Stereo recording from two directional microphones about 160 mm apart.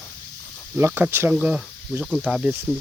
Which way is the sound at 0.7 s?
10° right (ahead or behind).